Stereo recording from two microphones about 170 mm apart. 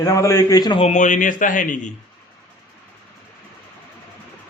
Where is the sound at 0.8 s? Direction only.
40° left (ahead or behind).